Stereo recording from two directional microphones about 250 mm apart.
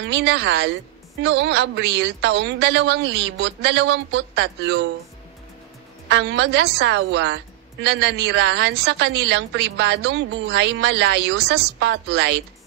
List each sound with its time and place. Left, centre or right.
0.0 s a woman's voice: right
6.0 s a woman's voice: right